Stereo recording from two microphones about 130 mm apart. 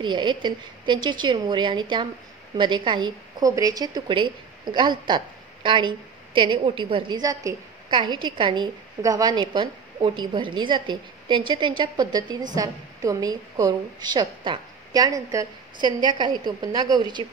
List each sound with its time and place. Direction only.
0.0 s a woman's voice: 35° right (ahead or behind)